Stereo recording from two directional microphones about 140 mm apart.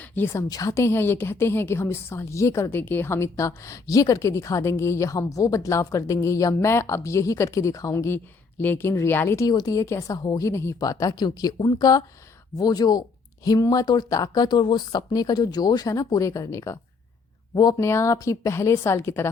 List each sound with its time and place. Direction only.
0.0 s a woman's voice: 15° left (ahead or behind)
0.4 s a woman's voice: 25° left (ahead or behind)